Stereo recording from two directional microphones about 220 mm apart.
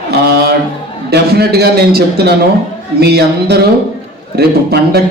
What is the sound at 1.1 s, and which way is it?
A man's voice, 45° right (ahead or behind).